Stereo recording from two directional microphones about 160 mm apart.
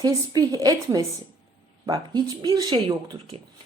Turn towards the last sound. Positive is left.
turn(degrees=-25)  # may be behind; listen again after turning